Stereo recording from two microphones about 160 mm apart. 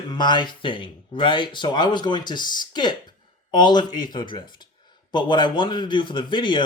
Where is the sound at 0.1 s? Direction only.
30° left (ahead or behind).